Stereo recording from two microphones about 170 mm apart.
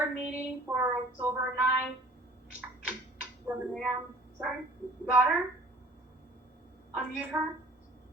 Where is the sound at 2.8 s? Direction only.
10° right (ahead or behind).